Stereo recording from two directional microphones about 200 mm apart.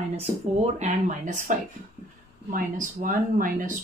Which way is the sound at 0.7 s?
35° right (ahead or behind).